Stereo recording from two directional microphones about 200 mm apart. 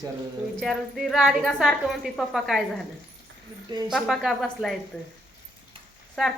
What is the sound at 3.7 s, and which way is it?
Speech, 20° right (ahead or behind).